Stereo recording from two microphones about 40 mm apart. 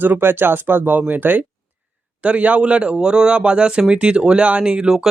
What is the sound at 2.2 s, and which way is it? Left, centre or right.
Speech, right.